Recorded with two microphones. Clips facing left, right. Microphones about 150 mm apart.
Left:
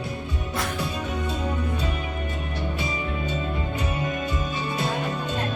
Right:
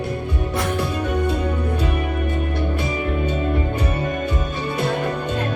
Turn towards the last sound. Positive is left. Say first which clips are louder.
# right 5 dB
turn(degrees=-60)  # may be behind; listen again after turning